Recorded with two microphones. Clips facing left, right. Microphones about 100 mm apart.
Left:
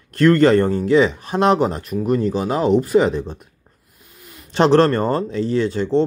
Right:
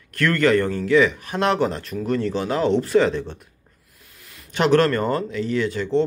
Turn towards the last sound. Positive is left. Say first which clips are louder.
# left 3 dB
turn(degrees=25)  # may be behind; listen again after turning